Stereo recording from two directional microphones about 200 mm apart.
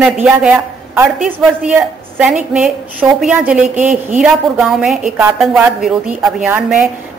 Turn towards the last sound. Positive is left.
turn(degrees=-5)  # may be behind; listen again after turning